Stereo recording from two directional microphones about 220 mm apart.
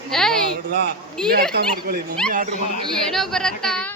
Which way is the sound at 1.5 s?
45° right (ahead or behind).